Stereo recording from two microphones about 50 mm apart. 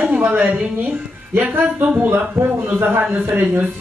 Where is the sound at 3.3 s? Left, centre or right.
Right.